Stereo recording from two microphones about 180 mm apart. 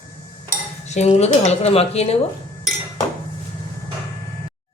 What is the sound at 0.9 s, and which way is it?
Speech, 40° left (ahead or behind).